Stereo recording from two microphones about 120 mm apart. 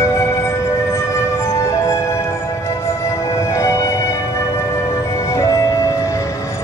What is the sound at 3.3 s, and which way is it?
Music, 25° left (ahead or behind).